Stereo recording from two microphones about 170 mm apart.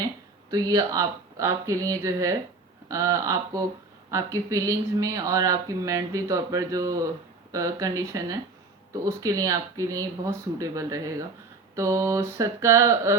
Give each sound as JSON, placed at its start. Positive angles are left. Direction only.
{"t": 0.5, "sound": "speech", "side_deg": -20}
{"t": 11.7, "sound": "mantra", "side_deg": -20}